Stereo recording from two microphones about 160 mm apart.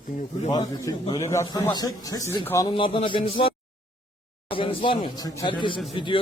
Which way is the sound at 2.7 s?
35° left (ahead or behind).